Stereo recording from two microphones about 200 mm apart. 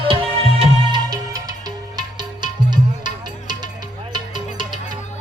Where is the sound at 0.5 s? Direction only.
20° right (ahead or behind).